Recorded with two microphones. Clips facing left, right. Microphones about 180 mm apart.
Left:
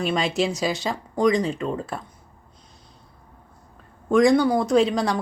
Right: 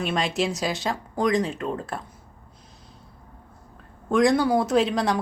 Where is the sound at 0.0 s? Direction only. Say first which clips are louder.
Left 2 dB; centre (ahead or behind).